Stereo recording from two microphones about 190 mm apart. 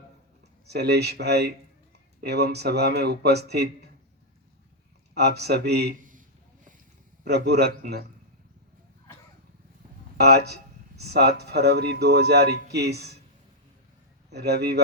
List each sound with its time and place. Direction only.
0.7 s speech: 60° right (ahead or behind)
5.1 s a man's voice: 60° right (ahead or behind); by 6.2 s 45° right (ahead or behind)
7.3 s speech: 60° right (ahead or behind)
10.2 s speech: 60° right (ahead or behind)
14.3 s speech: 60° right (ahead or behind)